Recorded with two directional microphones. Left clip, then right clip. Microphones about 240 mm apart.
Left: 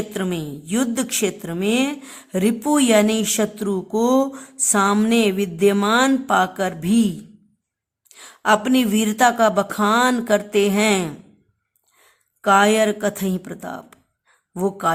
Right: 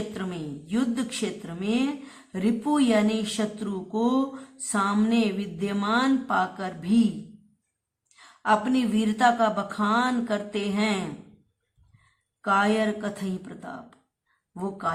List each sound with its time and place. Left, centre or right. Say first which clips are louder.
0.1 s a woman's voice: left 8 dB; left
8.1 s a woman's voice: left 6 dB; left
12.5 s a woman's voice: left 8 dB; left